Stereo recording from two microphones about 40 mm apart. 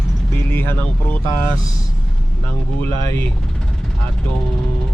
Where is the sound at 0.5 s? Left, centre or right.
Left.